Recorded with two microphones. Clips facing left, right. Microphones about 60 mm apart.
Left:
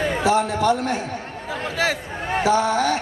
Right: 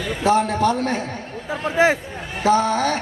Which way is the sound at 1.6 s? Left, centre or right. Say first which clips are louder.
Right 6 dB; right.